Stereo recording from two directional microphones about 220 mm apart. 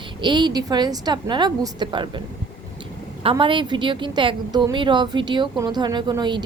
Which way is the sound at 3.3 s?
20° right (ahead or behind).